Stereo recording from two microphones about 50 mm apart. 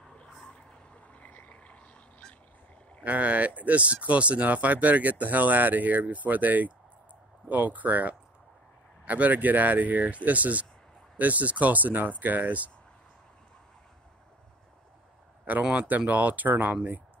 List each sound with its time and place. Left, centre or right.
1.0 s frog: left
3.0 s speech: right
15.7 s speech: right